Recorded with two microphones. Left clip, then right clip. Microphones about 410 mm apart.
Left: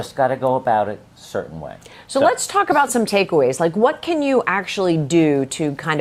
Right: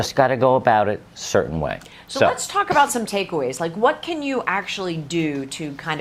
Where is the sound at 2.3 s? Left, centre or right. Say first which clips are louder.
Left 3 dB; left.